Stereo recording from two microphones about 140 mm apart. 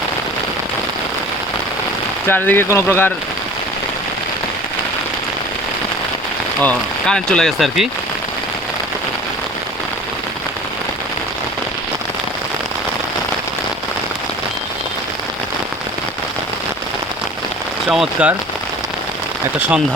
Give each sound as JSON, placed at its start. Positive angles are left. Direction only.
{"t": 2.2, "sound": "speech", "side_deg": 15}
{"t": 6.6, "sound": "speech", "side_deg": 10}
{"t": 17.8, "sound": "speech", "side_deg": -5}